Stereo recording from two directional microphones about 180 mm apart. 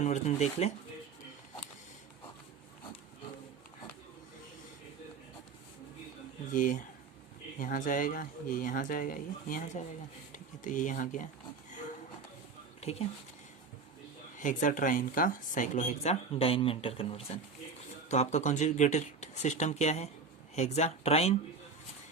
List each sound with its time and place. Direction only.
0.0 s speech: 40° left (ahead or behind)
6.5 s speech: 45° left (ahead or behind)
12.8 s speech: 35° left (ahead or behind)
14.3 s speech: 45° left (ahead or behind)